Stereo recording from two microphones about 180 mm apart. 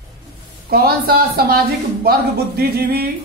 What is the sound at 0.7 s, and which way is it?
A man's voice, 55° right (ahead or behind).